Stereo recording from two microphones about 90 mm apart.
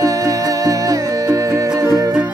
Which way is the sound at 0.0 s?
40° right (ahead or behind).